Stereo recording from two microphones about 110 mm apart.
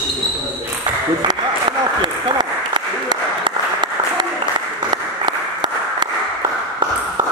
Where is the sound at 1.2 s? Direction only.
45° right (ahead or behind).